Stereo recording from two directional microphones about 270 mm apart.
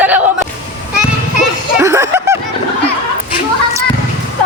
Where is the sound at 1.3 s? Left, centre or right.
Centre.